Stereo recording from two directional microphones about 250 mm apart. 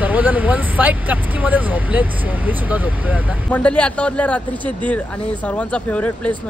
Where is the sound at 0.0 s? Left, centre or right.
Centre.